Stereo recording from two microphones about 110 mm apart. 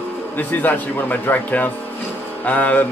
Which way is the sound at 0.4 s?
15° left (ahead or behind).